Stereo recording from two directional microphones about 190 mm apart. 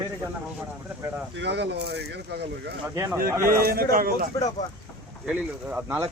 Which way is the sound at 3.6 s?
55° right (ahead or behind).